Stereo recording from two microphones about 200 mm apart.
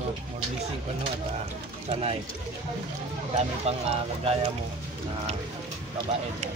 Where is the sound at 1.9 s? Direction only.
30° right (ahead or behind).